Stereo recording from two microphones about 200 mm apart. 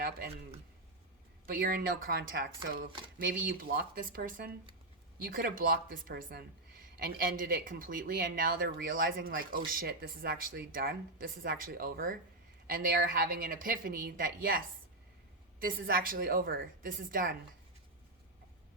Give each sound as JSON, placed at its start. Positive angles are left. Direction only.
{"t": 1.5, "sound": "speech", "side_deg": -45}
{"t": 15.6, "sound": "speech", "side_deg": -45}